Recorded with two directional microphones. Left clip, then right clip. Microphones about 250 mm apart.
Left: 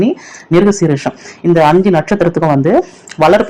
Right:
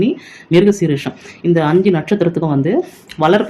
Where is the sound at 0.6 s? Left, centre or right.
Centre.